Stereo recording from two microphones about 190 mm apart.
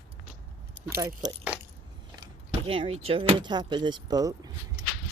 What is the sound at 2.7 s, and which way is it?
Speech, 30° right (ahead or behind).